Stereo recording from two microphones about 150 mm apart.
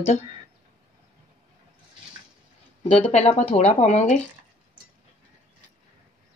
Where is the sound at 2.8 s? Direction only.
40° left (ahead or behind).